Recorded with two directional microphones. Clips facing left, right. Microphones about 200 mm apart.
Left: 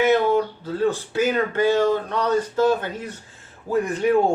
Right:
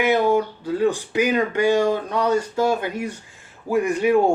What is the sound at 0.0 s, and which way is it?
Speech, 10° right (ahead or behind).